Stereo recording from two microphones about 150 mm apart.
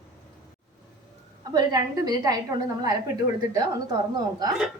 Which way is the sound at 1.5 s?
25° right (ahead or behind).